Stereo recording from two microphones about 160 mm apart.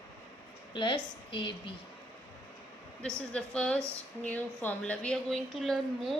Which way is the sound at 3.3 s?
5° left (ahead or behind).